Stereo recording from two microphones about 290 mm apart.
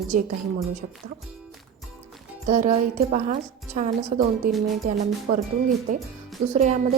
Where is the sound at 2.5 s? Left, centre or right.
Right.